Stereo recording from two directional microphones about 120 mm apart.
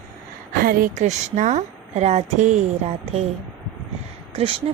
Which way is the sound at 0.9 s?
80° right.